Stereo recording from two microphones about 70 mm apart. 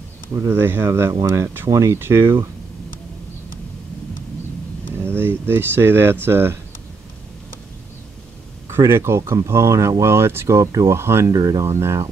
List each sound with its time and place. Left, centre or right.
0.3 s speech: right
0.6 s speech: right
4.9 s a sound: right
5.5 s speech: right
8.6 s speech: right
10.6 s speech: right
11.3 s speech: right
11.6 s speech: right